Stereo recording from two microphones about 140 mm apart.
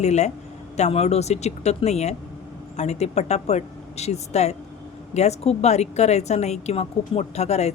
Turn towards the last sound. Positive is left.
turn(degrees=50)  # may be behind; listen again after turning